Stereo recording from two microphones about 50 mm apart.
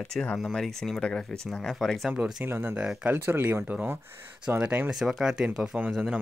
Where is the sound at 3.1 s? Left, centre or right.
Right.